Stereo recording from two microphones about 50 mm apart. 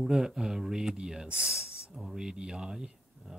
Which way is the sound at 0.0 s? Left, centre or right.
Centre.